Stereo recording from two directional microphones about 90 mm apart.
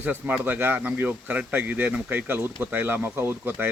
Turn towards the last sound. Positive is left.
turn(degrees=-25)  # may be behind; listen again after turning